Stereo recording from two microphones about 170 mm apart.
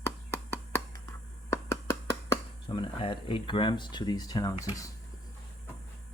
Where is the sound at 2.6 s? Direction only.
30° left (ahead or behind).